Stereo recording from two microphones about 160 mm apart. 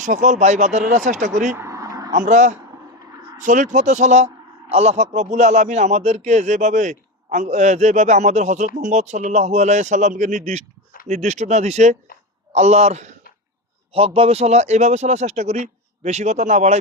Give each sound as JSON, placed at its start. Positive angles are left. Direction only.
{"t": 0.0, "sound": "a man's voice", "side_deg": -50}
{"t": 1.5, "sound": "a sound", "side_deg": -20}
{"t": 2.1, "sound": "a man's voice", "side_deg": -50}